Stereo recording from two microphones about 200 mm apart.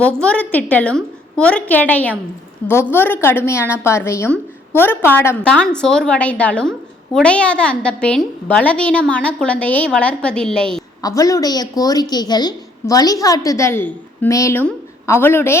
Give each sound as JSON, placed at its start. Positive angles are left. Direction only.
{"t": 0.0, "sound": "a woman's voice", "side_deg": 5}
{"t": 11.0, "sound": "a woman's voice", "side_deg": 15}